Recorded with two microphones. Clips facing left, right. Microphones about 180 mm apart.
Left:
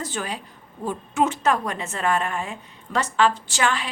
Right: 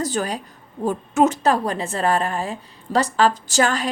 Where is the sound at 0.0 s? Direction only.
40° right (ahead or behind).